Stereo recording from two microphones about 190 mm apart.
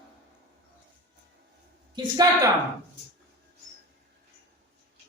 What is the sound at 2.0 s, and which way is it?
Speech, 20° right (ahead or behind).